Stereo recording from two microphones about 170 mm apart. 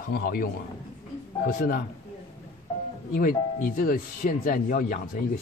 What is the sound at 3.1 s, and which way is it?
Speech, 55° left (ahead or behind).